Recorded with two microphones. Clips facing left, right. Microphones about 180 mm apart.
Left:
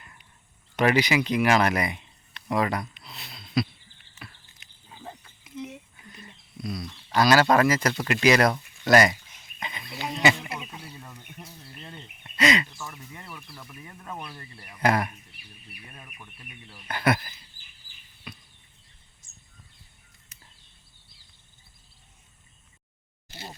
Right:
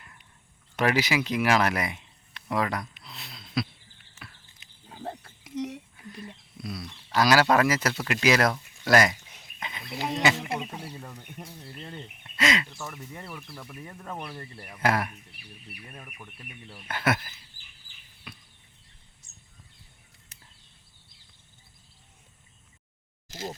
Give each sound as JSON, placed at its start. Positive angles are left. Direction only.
{"t": 0.8, "sound": "speech", "side_deg": -5}
{"t": 4.2, "sound": "a sound", "side_deg": 0}
{"t": 4.9, "sound": "wild animals", "side_deg": -60}
{"t": 6.6, "sound": "speech", "side_deg": -5}
{"t": 9.6, "sound": "a sound", "side_deg": 0}
{"t": 10.3, "sound": "a sound", "side_deg": -40}
{"t": 12.4, "sound": "speech", "side_deg": 0}
{"t": 14.8, "sound": "speech", "side_deg": -5}
{"t": 16.9, "sound": "speech", "side_deg": -5}
{"t": 18.3, "sound": "chop", "side_deg": 0}